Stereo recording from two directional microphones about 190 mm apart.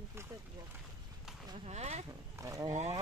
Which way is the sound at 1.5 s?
35° right (ahead or behind).